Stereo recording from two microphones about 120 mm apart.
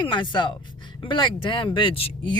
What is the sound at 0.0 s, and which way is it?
A woman's voice, 40° left (ahead or behind).